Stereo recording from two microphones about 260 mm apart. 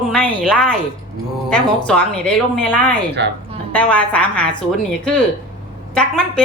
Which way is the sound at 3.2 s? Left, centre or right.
Right.